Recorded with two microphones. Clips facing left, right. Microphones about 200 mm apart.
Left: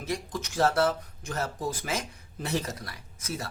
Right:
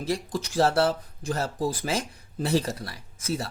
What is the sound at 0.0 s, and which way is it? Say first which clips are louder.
Speech: right 4 dB; 30° right (ahead or behind).